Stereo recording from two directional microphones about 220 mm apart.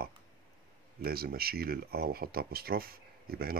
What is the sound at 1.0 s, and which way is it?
Speech, 45° right (ahead or behind).